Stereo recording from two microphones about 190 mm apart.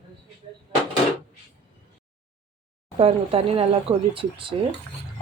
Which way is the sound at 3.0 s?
30° right (ahead or behind).